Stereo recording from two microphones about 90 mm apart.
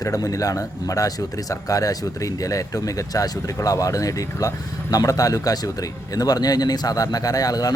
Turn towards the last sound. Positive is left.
turn(degrees=45)  # may be behind; listen again after turning